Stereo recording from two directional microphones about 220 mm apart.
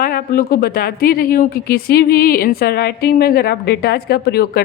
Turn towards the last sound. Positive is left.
turn(degrees=45)  # may be behind; listen again after turning